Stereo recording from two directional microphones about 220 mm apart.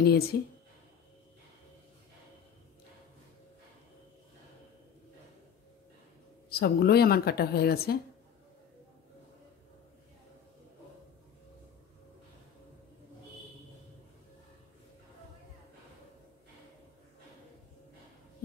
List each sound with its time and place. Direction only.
0.0 s a woman's voice: 45° left (ahead or behind)
6.5 s a woman's voice: 45° left (ahead or behind)